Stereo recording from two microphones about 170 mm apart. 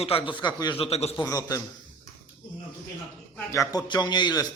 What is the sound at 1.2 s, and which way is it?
Speech, 20° left (ahead or behind).